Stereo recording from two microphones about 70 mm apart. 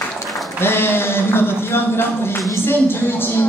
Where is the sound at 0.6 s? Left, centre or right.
Left.